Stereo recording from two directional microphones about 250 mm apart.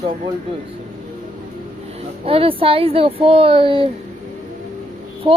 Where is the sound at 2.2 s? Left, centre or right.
Right.